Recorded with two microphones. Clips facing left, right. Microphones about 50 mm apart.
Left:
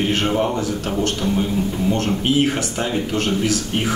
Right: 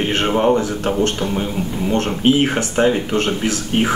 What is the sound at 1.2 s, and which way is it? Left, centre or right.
Speech, right.